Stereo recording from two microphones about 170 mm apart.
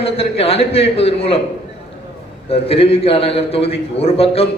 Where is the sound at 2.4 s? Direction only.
35° left (ahead or behind).